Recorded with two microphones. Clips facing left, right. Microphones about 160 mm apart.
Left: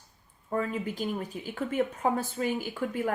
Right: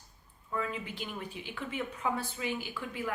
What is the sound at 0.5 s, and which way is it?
A woman's voice, 45° left (ahead or behind).